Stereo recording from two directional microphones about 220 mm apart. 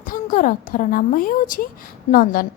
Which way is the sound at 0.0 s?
40° left (ahead or behind).